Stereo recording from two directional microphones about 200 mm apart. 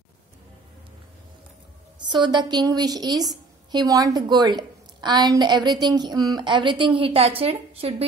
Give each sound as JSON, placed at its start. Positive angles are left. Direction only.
{"t": 2.0, "sound": "a woman's voice", "side_deg": -20}